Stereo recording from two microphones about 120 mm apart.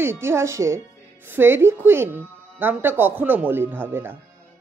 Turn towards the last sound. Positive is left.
turn(degrees=-20)  # may be behind; listen again after turning